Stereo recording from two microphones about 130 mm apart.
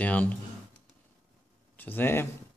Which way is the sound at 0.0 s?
10° left (ahead or behind).